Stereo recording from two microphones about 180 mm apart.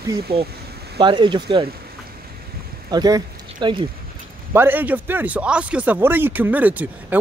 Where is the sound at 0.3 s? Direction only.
30° right (ahead or behind).